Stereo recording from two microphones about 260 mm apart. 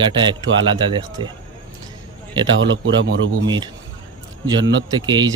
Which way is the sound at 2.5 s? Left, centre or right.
Right.